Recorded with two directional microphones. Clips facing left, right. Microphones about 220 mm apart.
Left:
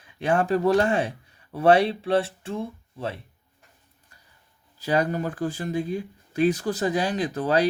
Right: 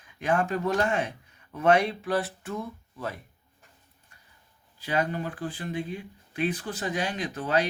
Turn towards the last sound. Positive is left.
turn(degrees=35)  # may be behind; listen again after turning